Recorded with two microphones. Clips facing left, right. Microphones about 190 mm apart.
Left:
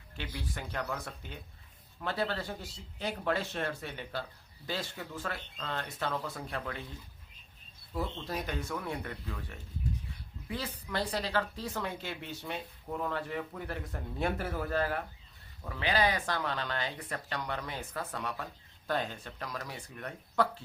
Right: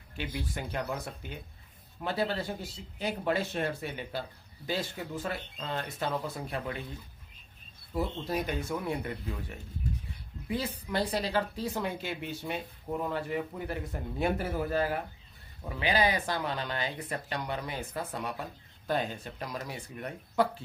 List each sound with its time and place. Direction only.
0.2 s speech: 15° right (ahead or behind)
7.9 s speech: 15° right (ahead or behind)